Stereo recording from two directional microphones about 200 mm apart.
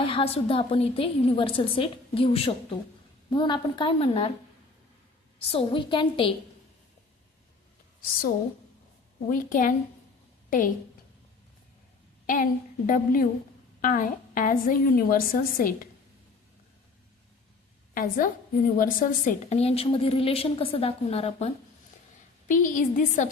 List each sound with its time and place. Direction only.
0.0 s a woman's voice: 25° left (ahead or behind)
5.5 s a woman's voice: 25° left (ahead or behind)
9.2 s a woman's voice: 40° left (ahead or behind)
12.2 s a woman's voice: 40° left (ahead or behind)
17.9 s a woman's voice: 45° left (ahead or behind)
22.4 s a woman's voice: 40° left (ahead or behind)